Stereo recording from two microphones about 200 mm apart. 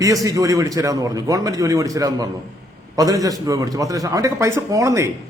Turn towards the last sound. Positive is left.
turn(degrees=-15)  # may be behind; listen again after turning